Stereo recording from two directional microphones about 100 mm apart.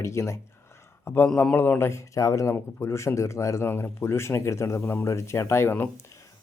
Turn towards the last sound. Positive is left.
turn(degrees=20)  # may be behind; listen again after turning